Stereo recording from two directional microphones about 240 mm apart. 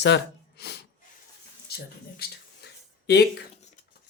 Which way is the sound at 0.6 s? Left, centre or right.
Left.